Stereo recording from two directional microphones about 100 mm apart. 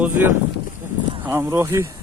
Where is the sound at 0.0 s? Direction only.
20° right (ahead or behind).